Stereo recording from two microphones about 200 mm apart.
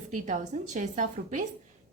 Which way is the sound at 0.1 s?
40° right (ahead or behind).